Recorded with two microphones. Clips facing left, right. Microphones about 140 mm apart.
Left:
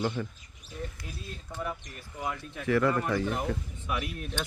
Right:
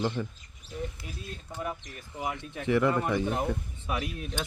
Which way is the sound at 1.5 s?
15° right (ahead or behind).